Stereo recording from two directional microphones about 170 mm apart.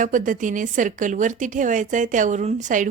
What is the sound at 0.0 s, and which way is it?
A woman's voice, 50° right (ahead or behind).